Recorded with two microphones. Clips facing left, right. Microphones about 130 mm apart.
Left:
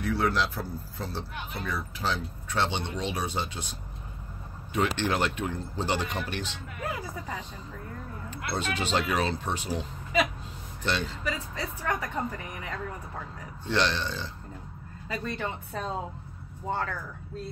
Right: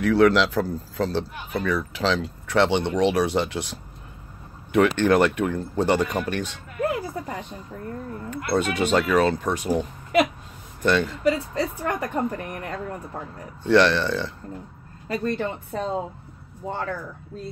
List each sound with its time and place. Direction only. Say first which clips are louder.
0.0 s speech: right 10 dB; 90° right; by 3.7 s 70° right (ahead or behind)
4.7 s speech: right 9 dB; 55° right (ahead or behind)
15.0 s speech: right 7 dB; 50° right (ahead or behind)